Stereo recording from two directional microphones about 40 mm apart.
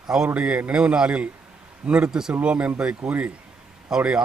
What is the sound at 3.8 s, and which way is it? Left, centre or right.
Speech, centre.